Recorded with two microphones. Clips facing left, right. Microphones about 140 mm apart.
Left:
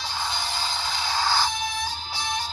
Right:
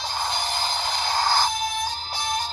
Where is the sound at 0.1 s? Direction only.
45° right (ahead or behind).